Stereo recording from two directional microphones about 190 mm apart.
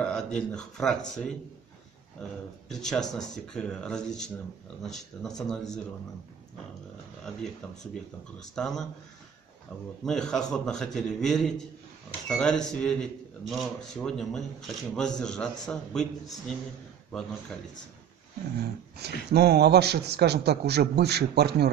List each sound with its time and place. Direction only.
0.0 s a man's voice: 5° left (ahead or behind)
7.6 s a man's voice: 5° left (ahead or behind)
10.0 s a man's voice: 5° left (ahead or behind)
18.9 s a man's voice: 60° right (ahead or behind)